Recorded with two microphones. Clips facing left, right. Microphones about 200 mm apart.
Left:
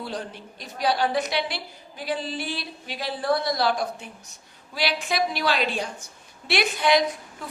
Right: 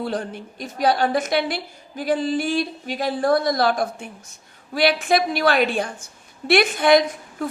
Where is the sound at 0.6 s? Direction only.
50° right (ahead or behind).